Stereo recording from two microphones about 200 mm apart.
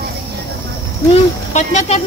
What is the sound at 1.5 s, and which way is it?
Speech, 35° left (ahead or behind).